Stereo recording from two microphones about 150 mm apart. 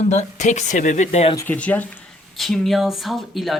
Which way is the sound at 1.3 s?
10° left (ahead or behind).